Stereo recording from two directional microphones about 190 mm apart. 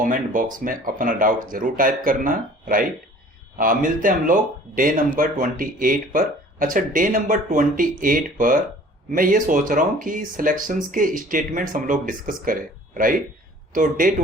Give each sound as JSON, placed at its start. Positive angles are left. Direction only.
{"t": 0.0, "sound": "speech", "side_deg": -45}